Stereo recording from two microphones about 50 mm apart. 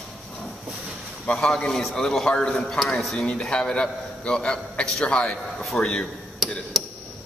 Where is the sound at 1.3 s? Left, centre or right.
Centre.